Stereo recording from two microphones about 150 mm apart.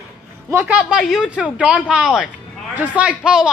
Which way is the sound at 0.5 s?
15° right (ahead or behind).